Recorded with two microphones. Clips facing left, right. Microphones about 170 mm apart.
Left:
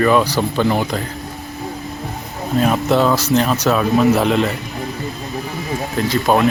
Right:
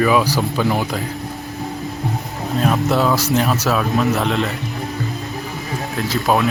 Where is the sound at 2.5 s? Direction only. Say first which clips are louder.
Left 2 dB; centre (ahead or behind).